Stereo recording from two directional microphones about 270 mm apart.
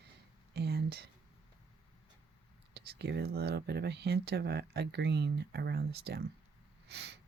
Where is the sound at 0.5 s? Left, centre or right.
Right.